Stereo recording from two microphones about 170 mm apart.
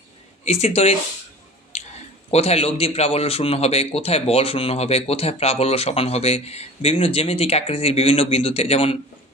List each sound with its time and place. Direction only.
0.5 s speech: 40° left (ahead or behind)
1.7 s a sound: 40° left (ahead or behind)
2.3 s speech: 35° left (ahead or behind)